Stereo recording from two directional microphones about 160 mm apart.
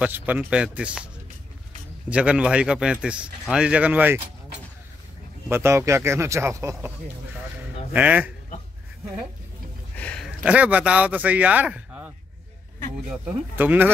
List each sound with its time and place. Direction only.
0.0 s speech: 10° right (ahead or behind)
2.0 s speech: 5° right (ahead or behind)
5.5 s speech: 15° right (ahead or behind)
7.9 s speech: 10° right (ahead or behind)
9.9 s a sound: 10° left (ahead or behind)
10.2 s a man's voice: 5° right (ahead or behind)
13.1 s speech: 10° right (ahead or behind)